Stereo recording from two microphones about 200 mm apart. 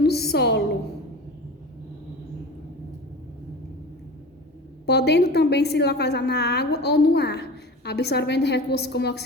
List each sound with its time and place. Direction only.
0.0 s a woman's voice: 55° left (ahead or behind)
4.9 s a woman's voice: 55° left (ahead or behind)